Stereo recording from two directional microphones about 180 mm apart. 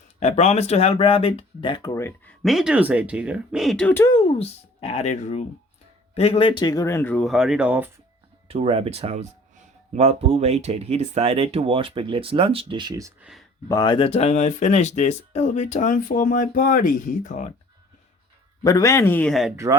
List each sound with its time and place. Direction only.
0.2 s speech: 35° left (ahead or behind); by 2.3 s 15° left (ahead or behind)
2.4 s speech: centre (ahead or behind)
4.1 s speech: 30° left (ahead or behind); by 7.9 s 10° right (ahead or behind)
8.4 s speech: 35° right (ahead or behind)
13.7 s speech: 20° left (ahead or behind); by 17.5 s 45° left (ahead or behind)
18.6 s speech: 20° left (ahead or behind); by 19.5 s centre (ahead or behind)